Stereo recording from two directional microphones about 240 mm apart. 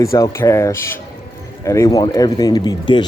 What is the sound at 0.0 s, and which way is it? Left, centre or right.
Speech, centre.